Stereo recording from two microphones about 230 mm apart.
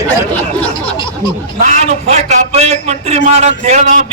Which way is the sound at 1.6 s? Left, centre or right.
Right.